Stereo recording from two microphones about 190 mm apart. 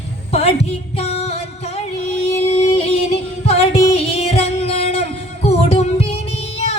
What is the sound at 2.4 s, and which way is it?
Music, 30° left (ahead or behind).